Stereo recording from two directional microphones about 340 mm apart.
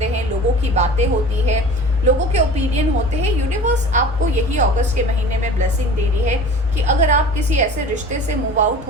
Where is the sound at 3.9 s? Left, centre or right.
Right.